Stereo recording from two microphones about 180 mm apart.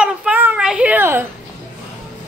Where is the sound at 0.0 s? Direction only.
5° right (ahead or behind).